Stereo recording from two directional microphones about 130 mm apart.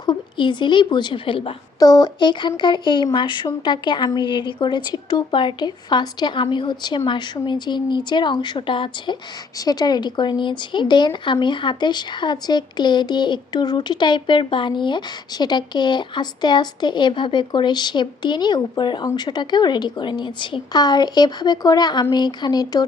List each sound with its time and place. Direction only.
0.0 s a woman's voice: 35° left (ahead or behind)
1.8 s speech: 30° left (ahead or behind)